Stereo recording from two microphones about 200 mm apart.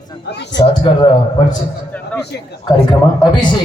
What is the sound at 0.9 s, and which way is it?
Speech, 25° left (ahead or behind).